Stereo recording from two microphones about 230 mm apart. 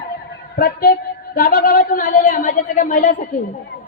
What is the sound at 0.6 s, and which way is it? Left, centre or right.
Speech, left.